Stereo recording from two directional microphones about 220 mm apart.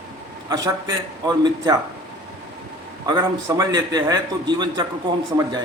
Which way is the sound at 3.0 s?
15° right (ahead or behind).